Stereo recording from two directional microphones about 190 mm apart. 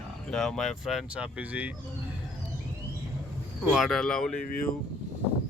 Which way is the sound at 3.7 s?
Centre (ahead or behind).